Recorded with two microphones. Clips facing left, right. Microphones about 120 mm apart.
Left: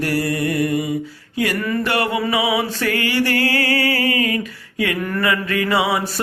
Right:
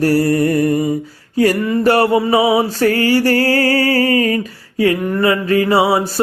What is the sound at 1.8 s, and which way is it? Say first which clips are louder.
Mantra: right 11 dB; 40° right (ahead or behind).